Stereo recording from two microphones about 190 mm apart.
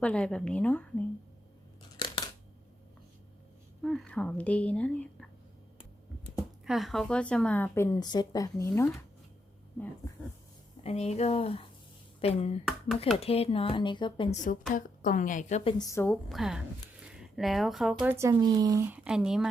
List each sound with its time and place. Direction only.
0.0 s a woman's voice: 5° left (ahead or behind)
2.0 s a sound: 25° left (ahead or behind)
3.8 s a woman's voice: 5° left (ahead or behind)
6.7 s a woman's voice: centre (ahead or behind)
10.8 s speech: 35° left (ahead or behind)
14.7 s a woman's voice: 45° left (ahead or behind)
15.8 s a woman's voice: 15° left (ahead or behind)
16.3 s a woman's voice: centre (ahead or behind)
18.2 s speech: 20° right (ahead or behind); by 19.5 s 5° right (ahead or behind)